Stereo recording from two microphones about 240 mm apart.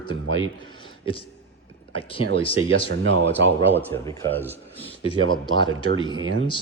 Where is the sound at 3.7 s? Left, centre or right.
Centre.